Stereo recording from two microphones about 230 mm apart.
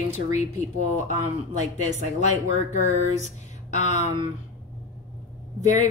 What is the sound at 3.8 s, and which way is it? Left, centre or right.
Speech, left.